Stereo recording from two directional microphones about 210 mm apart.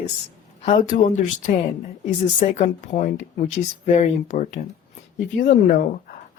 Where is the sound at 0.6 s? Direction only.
35° left (ahead or behind).